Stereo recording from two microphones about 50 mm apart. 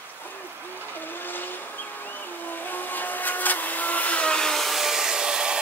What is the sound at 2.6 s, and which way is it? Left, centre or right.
Vacuum cleaner, left.